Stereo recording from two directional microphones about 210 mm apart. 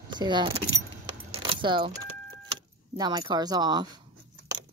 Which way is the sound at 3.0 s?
20° right (ahead or behind).